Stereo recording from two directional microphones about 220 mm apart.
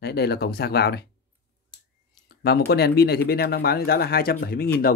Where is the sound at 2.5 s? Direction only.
45° left (ahead or behind).